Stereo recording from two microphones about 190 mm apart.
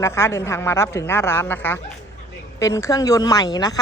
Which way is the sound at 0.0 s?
15° left (ahead or behind).